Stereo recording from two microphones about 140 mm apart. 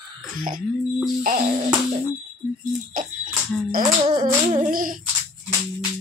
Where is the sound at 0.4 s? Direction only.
80° right.